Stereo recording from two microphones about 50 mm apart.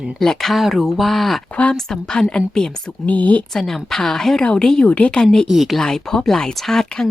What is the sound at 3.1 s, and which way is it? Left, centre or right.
Speech, left.